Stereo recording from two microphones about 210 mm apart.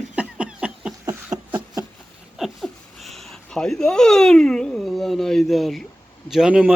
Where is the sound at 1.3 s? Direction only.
15° right (ahead or behind).